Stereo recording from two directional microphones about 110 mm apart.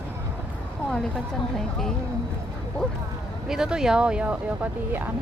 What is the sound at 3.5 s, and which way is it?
Speech, 5° right (ahead or behind).